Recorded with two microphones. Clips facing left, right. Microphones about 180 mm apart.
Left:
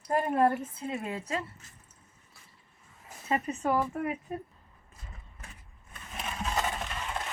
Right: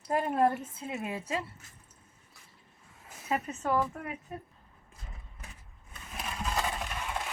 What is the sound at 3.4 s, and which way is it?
Speech, 10° left (ahead or behind).